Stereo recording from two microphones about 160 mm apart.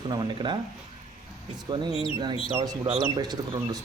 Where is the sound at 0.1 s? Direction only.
30° right (ahead or behind).